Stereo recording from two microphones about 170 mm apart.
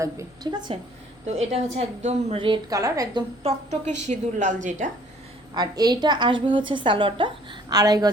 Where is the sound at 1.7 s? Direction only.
40° right (ahead or behind).